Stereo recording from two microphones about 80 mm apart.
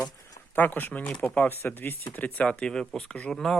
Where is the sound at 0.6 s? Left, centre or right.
Left.